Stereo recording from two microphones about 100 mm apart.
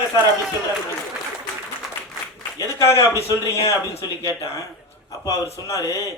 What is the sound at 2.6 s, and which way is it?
Speech, 30° left (ahead or behind).